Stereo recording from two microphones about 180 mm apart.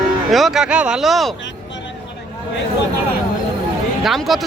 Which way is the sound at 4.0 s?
Centre (ahead or behind).